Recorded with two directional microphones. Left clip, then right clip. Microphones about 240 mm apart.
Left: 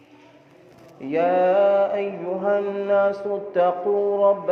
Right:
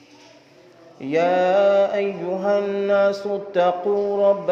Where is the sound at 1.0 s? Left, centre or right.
Right.